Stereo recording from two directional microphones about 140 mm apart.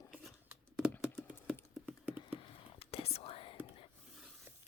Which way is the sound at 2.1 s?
40° left (ahead or behind).